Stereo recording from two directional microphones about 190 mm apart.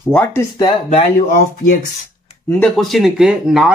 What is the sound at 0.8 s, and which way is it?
Speech, 40° left (ahead or behind).